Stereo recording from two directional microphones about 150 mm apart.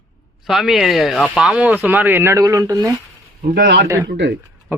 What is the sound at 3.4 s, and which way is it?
Speech, 85° right.